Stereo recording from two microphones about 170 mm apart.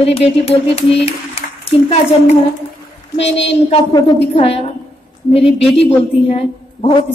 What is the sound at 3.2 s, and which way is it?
A woman's voice, 35° left (ahead or behind).